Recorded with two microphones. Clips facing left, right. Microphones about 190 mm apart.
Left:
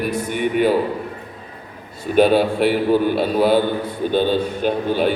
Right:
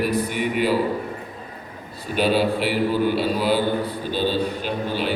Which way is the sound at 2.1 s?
55° left (ahead or behind).